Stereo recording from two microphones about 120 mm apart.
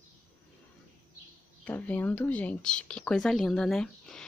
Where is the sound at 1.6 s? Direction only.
15° left (ahead or behind).